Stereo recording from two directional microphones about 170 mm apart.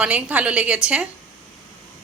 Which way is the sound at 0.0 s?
10° right (ahead or behind).